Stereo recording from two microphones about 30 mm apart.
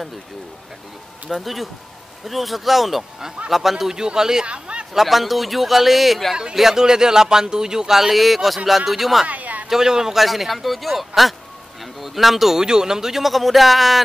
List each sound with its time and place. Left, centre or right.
1.3 s a man's voice: centre
3.9 s speech: right
4.5 s a man's voice: right
4.9 s a man's voice: centre
8.2 s a man's voice: centre
9.3 s a sound: right
9.7 s speech: centre
10.1 s a man's voice: centre
12.5 s speech: right
13.2 s a man's voice: centre